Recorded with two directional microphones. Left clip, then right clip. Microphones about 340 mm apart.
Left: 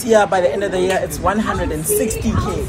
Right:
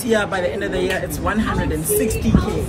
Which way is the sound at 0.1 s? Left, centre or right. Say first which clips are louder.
Left 6 dB; centre.